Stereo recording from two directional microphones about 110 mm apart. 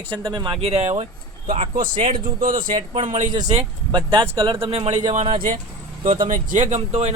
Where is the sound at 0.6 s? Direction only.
75° right (ahead or behind).